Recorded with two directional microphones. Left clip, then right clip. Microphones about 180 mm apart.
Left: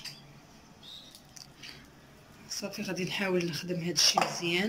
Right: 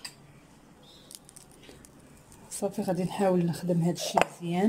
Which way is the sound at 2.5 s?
35° right (ahead or behind).